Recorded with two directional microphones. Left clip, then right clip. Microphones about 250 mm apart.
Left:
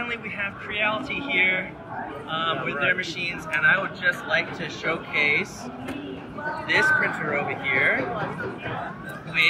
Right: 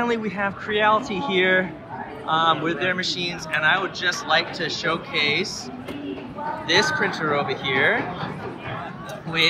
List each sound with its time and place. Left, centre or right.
0.0 s a man's voice: centre
6.7 s a man's voice: centre
9.4 s a man's voice: centre